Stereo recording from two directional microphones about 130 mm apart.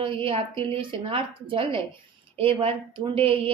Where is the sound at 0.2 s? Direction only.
45° right (ahead or behind).